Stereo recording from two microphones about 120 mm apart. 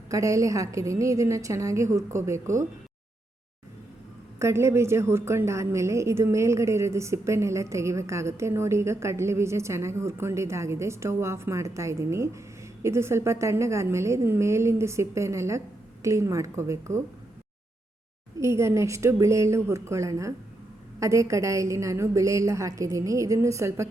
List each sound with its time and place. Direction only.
0.1 s a woman's voice: 25° right (ahead or behind)
4.4 s a woman's voice: 25° right (ahead or behind)
18.3 s a woman's voice: 25° right (ahead or behind)